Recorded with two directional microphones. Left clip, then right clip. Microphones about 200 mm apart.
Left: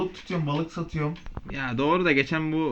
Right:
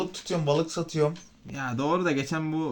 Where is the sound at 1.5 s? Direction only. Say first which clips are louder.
Left 2 dB; 15° right (ahead or behind).